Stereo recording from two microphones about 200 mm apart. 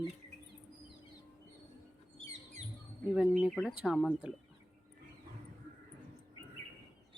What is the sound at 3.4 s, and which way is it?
Speech, centre (ahead or behind).